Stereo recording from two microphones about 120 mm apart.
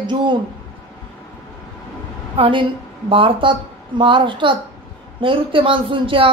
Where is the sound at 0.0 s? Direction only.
40° right (ahead or behind).